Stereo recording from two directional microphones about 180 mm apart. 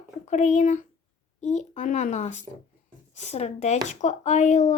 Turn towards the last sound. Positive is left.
turn(degrees=40)  # may be behind; listen again after turning